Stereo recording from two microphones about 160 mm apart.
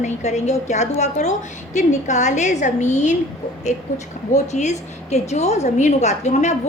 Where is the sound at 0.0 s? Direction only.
45° left (ahead or behind).